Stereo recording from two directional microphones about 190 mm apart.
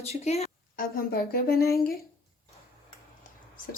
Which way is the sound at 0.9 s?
55° left (ahead or behind).